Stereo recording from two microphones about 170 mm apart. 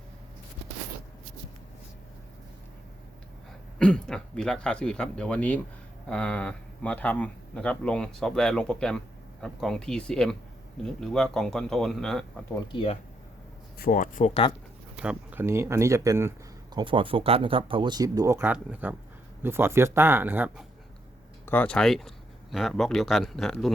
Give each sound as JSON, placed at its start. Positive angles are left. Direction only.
{"t": 3.8, "sound": "speech", "side_deg": 5}
{"t": 12.7, "sound": "speech", "side_deg": 35}
{"t": 13.7, "sound": "speech", "side_deg": 60}
{"t": 14.9, "sound": "speech", "side_deg": -10}
{"t": 16.7, "sound": "speech", "side_deg": -30}
{"t": 21.4, "sound": "speech", "side_deg": 10}